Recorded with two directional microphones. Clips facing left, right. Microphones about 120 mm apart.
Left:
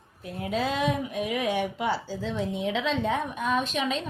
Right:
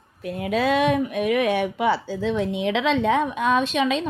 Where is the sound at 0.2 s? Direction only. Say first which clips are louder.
Right 5 dB; 85° right.